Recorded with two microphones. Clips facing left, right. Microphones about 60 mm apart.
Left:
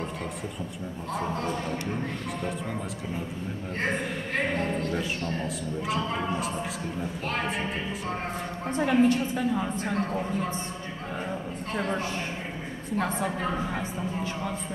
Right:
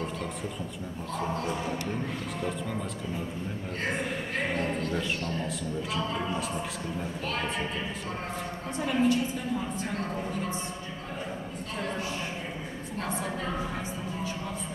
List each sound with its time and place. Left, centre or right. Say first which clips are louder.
4.6 s a woman's voice: left 1 dB; left
8.7 s a woman's voice: left 4 dB; left
11.7 s a woman's voice: left 5 dB; left
13.0 s a woman's voice: left 3 dB; left